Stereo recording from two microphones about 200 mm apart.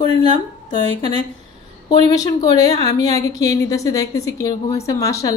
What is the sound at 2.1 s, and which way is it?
A woman's voice, 20° left (ahead or behind).